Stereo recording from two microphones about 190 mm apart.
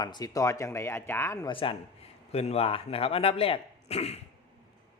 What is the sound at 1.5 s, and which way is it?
Speech, 25° left (ahead or behind).